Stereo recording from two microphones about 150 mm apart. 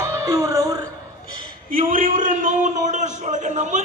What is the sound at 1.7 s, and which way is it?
A man's voice, 65° right (ahead or behind).